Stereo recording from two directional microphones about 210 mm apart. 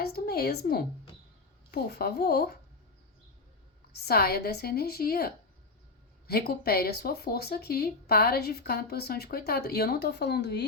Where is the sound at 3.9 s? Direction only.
50° left (ahead or behind).